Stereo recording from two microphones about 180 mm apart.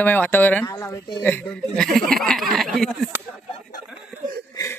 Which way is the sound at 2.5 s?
Centre (ahead or behind).